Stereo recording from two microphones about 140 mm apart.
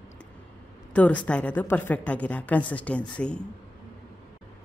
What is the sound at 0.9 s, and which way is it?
A woman's voice, 10° left (ahead or behind).